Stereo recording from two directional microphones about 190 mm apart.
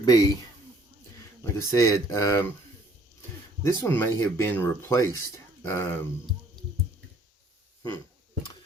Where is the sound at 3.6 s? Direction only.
15° left (ahead or behind).